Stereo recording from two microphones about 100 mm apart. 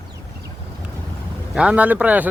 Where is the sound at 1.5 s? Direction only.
10° right (ahead or behind).